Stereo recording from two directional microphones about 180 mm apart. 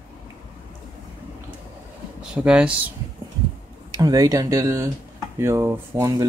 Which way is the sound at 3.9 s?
20° right (ahead or behind).